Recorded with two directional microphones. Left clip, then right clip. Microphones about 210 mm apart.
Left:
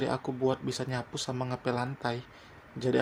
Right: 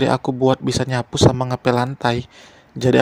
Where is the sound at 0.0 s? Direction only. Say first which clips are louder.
Right 13 dB; 35° right (ahead or behind).